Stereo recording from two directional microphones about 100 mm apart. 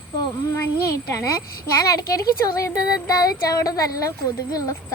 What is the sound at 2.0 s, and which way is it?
Speech, 35° left (ahead or behind).